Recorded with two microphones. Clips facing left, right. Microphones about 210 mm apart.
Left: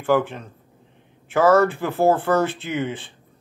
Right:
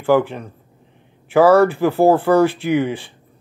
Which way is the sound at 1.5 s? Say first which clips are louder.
Right 4 dB; 15° right (ahead or behind).